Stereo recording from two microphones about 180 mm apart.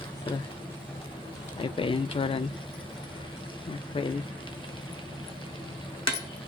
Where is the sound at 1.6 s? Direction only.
30° left (ahead or behind).